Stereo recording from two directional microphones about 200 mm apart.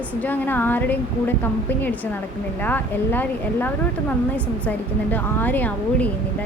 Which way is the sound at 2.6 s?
10° left (ahead or behind).